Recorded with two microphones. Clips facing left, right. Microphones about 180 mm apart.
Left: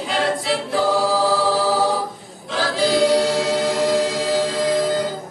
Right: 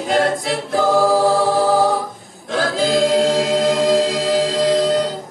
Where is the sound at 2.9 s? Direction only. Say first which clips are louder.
Right 1 dB; 90° right.